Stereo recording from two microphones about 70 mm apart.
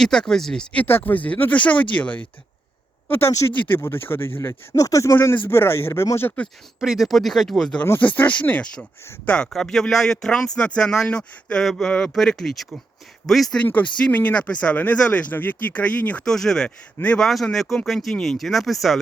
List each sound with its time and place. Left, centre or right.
0.0 s speech: centre
0.9 s speech: left
3.1 s speech: left
4.7 s speech: left
5.3 s speech: left
6.7 s speech: centre
7.9 s speech: left; by 13.6 s centre
13.6 s speech: left
16.2 s speech: centre
16.6 s speech: centre
17.2 s speech: centre